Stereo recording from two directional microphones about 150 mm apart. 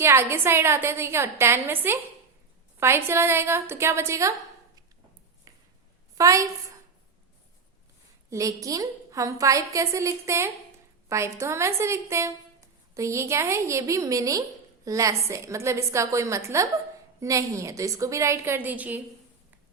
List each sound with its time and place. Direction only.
0.0 s a woman's voice: 15° right (ahead or behind)
5.5 s a sound: 25° right (ahead or behind)
6.1 s a woman's voice: 20° right (ahead or behind)
8.3 s a woman's voice: 20° right (ahead or behind)